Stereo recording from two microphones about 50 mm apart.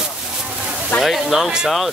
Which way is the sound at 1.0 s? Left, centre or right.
Centre.